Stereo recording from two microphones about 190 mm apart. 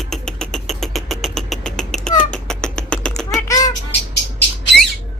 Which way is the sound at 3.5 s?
20° left (ahead or behind).